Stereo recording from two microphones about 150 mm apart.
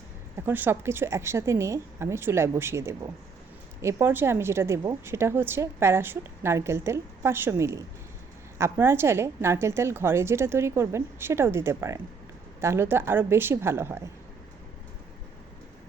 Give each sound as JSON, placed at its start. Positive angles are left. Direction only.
{"t": 0.3, "sound": "a woman's voice", "side_deg": -15}